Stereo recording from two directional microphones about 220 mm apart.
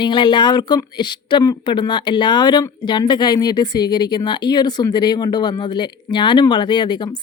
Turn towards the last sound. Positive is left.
turn(degrees=20)  # may be behind; listen again after turning